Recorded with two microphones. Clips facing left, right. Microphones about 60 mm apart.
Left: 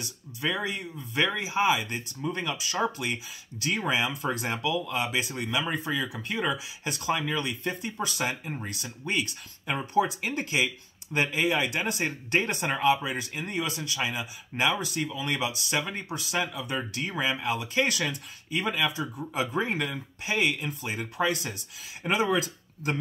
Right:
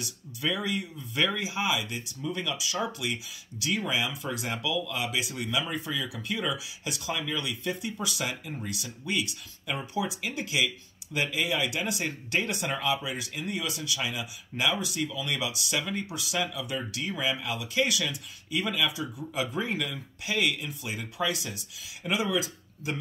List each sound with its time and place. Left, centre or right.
0.0 s speech: left